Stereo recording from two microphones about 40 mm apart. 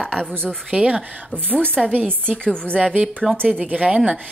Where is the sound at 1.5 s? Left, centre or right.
Left.